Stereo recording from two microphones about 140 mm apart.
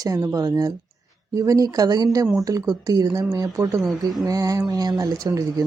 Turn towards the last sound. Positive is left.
turn(degrees=-25)  # may be behind; listen again after turning